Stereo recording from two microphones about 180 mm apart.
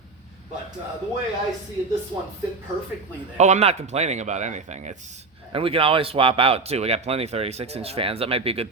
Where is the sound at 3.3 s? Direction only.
40° right (ahead or behind).